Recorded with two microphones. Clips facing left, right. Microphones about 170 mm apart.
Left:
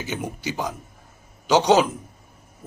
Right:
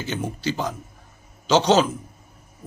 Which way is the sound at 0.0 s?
15° left (ahead or behind).